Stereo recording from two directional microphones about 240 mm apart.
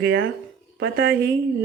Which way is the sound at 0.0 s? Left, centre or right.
Right.